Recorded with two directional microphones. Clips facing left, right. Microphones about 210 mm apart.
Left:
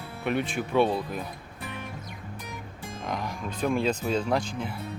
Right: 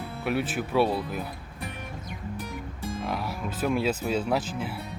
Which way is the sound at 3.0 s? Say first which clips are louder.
Left 1 dB; 5° right (ahead or behind).